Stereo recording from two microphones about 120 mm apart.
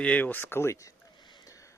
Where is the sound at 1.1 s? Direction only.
40° left (ahead or behind).